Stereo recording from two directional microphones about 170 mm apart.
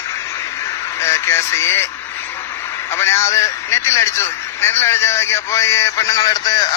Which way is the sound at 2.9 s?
15° left (ahead or behind).